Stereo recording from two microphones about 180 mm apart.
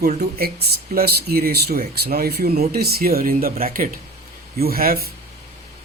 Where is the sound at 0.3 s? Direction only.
60° right (ahead or behind).